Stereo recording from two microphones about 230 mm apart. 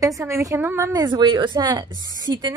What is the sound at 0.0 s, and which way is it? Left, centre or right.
A woman's voice, centre.